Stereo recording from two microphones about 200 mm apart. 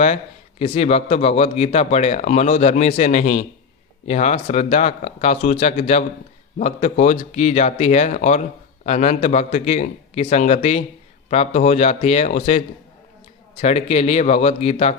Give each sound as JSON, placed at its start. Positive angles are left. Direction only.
{"t": 0.6, "sound": "speech", "side_deg": 30}